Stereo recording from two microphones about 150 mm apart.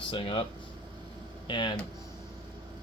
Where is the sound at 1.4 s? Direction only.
30° left (ahead or behind).